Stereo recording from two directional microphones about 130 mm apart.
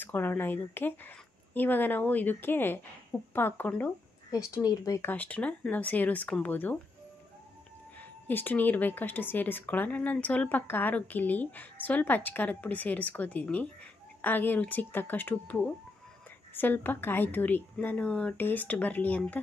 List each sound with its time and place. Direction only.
0.0 s a woman's voice: 15° left (ahead or behind)
4.5 s a woman's voice: 25° left (ahead or behind)
8.0 s a woman's voice: 15° left (ahead or behind)